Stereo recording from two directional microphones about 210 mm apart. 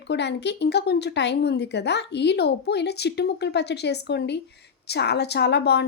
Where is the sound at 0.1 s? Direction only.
55° left (ahead or behind).